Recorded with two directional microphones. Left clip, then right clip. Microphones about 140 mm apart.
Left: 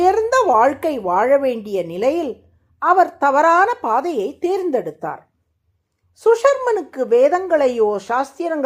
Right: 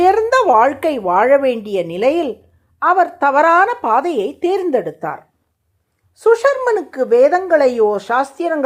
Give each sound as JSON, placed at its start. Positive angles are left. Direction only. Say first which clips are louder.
{"t": 0.0, "sound": "a woman's voice", "louder": "right 3 dB", "side_deg": -20}